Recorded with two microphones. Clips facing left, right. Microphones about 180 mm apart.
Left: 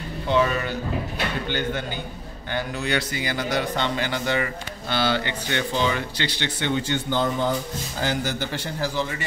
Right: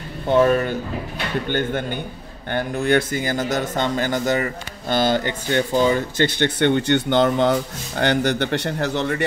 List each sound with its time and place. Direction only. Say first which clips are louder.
0.3 s a man's voice: right 6 dB; 50° right (ahead or behind)